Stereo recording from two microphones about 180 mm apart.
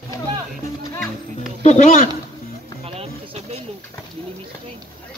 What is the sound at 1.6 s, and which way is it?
Speech, 40° left (ahead or behind).